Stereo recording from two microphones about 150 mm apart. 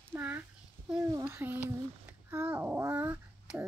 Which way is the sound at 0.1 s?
10° right (ahead or behind).